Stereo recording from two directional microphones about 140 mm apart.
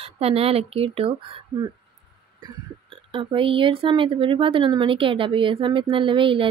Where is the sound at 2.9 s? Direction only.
40° right (ahead or behind).